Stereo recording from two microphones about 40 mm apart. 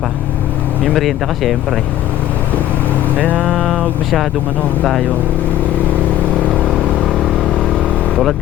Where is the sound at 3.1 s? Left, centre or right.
Left.